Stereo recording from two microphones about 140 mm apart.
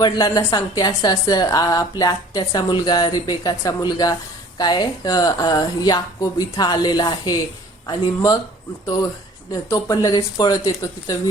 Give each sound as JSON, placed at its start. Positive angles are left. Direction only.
{"t": 0.0, "sound": "a woman's voice", "side_deg": 30}
{"t": 9.5, "sound": "a woman's voice", "side_deg": 25}